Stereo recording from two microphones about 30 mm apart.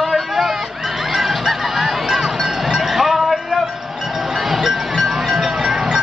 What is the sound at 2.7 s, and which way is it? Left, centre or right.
Basketball bounce, centre.